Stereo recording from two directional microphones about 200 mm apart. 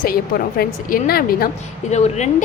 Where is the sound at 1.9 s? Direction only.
35° left (ahead or behind).